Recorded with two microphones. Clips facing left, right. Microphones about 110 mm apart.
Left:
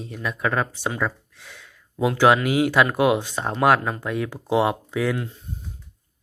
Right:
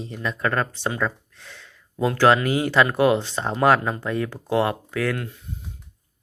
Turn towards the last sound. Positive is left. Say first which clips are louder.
# left 1 dB
turn(degrees=15)  # may be behind; listen again after turning